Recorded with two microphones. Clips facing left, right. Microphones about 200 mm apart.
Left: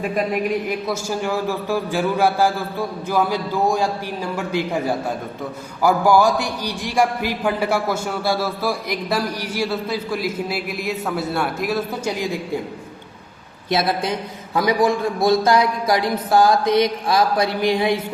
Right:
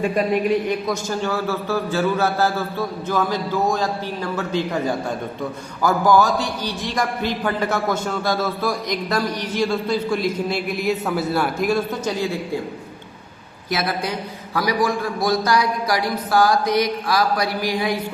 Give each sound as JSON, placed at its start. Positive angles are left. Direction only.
{"t": 0.0, "sound": "a man's voice", "side_deg": 0}
{"t": 5.8, "sound": "a man's voice", "side_deg": 10}
{"t": 12.0, "sound": "a man's voice", "side_deg": 15}
{"t": 13.7, "sound": "a man's voice", "side_deg": 25}